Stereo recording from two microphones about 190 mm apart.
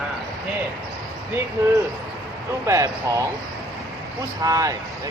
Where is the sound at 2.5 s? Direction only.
15° right (ahead or behind).